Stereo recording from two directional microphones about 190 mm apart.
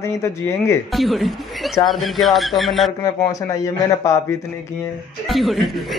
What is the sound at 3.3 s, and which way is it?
Speech, 15° left (ahead or behind).